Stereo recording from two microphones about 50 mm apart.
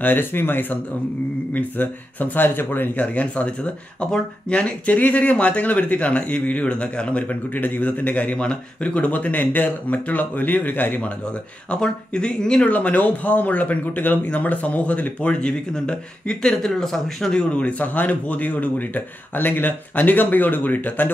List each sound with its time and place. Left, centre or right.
0.0 s speech: left
3.0 s speech: left
7.5 s speech: left
11.7 s speech: centre
16.5 s speech: centre
17.3 s speech: left